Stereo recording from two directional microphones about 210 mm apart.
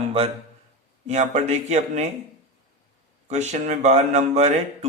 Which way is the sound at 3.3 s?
35° right (ahead or behind).